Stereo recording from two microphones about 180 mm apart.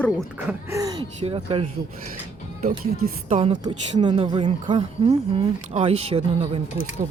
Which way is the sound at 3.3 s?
30° right (ahead or behind).